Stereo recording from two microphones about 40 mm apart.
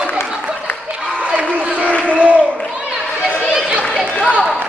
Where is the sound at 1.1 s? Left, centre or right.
Right.